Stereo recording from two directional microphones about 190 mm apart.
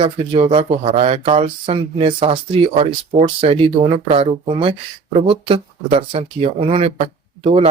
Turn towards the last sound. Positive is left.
turn(degrees=-35)  # may be behind; listen again after turning